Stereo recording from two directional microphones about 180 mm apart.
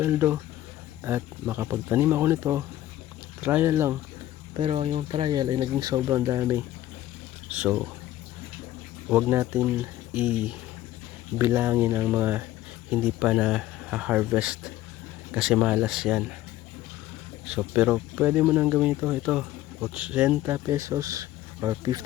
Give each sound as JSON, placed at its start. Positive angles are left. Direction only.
{"t": 0.0, "sound": "speech", "side_deg": -15}
{"t": 4.5, "sound": "speech", "side_deg": -30}
{"t": 9.0, "sound": "speech", "side_deg": -10}
{"t": 17.4, "sound": "speech", "side_deg": -5}